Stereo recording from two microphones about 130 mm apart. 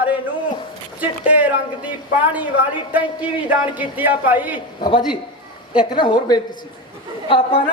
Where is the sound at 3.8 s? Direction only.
15° right (ahead or behind).